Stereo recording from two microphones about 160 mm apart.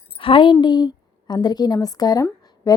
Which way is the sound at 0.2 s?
35° left (ahead or behind).